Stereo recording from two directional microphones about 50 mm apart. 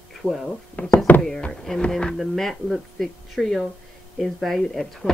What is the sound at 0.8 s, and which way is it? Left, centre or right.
Speech, left.